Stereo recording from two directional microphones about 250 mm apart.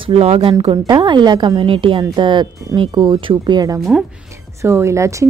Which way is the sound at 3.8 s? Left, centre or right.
Centre.